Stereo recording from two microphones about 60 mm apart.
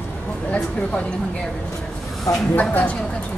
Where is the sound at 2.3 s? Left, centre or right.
Left.